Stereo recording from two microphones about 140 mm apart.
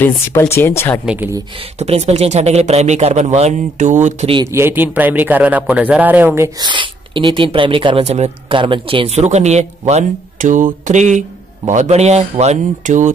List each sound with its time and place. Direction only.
0.4 s speech: 20° left (ahead or behind)
1.0 s speech: 10° right (ahead or behind)
1.8 s speech: 50° right (ahead or behind)
4.5 s speech: 15° right (ahead or behind)
6.6 s speech: 35° right (ahead or behind); by 13.1 s 65° right (ahead or behind)